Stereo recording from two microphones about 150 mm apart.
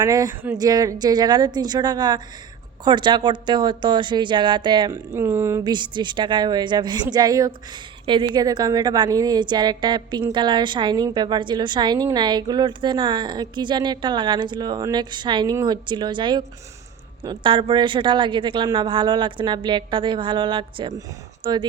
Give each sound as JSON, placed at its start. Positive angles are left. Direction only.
{"t": 0.0, "sound": "a woman's voice", "side_deg": -25}
{"t": 5.1, "sound": "speech", "side_deg": -15}
{"t": 5.6, "sound": "a woman's voice", "side_deg": -30}